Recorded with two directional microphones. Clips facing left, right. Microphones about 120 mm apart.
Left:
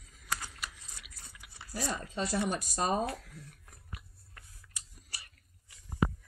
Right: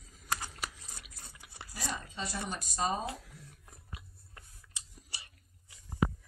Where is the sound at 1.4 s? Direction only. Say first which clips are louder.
Right 1 dB; 35° right (ahead or behind).